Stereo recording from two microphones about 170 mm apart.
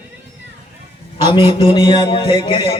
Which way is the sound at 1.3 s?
30° left (ahead or behind).